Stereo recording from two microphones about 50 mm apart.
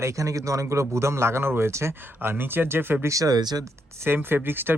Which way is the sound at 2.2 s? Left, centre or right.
Right.